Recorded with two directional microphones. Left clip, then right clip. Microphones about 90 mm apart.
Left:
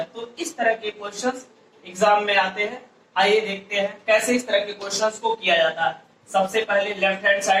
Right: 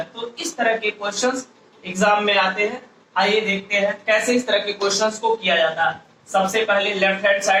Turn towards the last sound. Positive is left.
turn(degrees=-35)  # may be behind; listen again after turning